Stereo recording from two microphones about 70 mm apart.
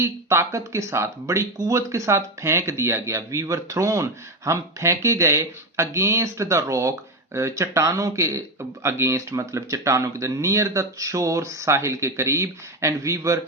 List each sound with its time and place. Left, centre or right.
0.0 s speech: right
1.5 s speech: right